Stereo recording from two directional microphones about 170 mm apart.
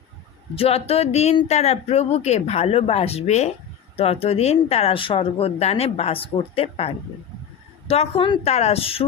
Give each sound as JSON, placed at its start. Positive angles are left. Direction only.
{"t": 0.5, "sound": "speech", "side_deg": 35}